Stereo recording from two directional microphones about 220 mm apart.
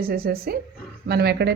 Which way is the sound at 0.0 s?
45° right (ahead or behind).